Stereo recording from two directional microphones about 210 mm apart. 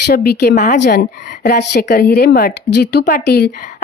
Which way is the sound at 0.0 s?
45° left (ahead or behind).